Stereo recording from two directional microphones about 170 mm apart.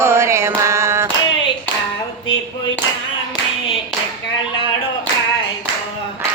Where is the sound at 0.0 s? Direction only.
15° right (ahead or behind).